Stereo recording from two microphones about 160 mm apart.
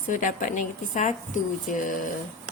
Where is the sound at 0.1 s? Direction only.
55° left (ahead or behind).